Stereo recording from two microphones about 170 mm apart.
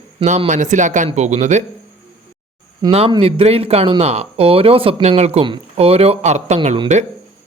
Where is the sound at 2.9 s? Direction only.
35° right (ahead or behind).